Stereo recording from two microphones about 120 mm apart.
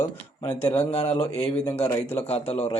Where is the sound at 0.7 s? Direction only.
55° left (ahead or behind).